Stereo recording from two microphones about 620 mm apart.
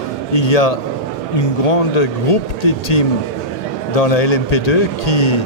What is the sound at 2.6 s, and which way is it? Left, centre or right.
A man's voice, left.